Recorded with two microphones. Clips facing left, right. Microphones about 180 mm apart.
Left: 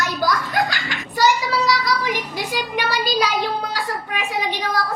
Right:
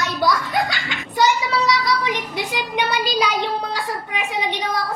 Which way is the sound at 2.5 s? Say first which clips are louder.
Even; 20° right (ahead or behind).